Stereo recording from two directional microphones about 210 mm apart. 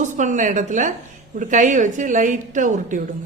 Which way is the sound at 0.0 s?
35° right (ahead or behind).